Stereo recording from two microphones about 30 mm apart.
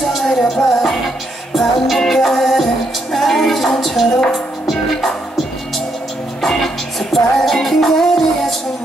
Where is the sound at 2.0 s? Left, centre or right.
Centre.